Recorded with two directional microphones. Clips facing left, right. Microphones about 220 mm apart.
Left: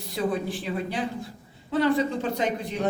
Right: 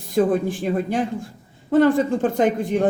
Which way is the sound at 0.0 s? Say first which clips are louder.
Right 8 dB; 50° right (ahead or behind).